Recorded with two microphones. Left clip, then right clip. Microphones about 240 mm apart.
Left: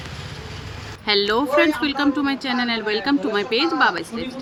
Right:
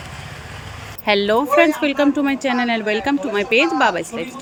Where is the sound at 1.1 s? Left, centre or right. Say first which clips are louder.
Right 3 dB; centre.